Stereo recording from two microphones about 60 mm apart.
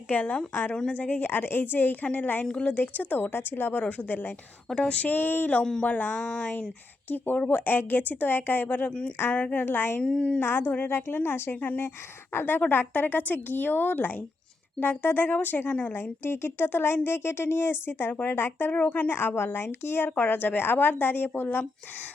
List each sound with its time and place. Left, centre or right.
0.1 s a woman's voice: left
9.6 s speech: left
10.0 s a woman's voice: centre
10.4 s speech: left
15.9 s speech: left
18.7 s speech: left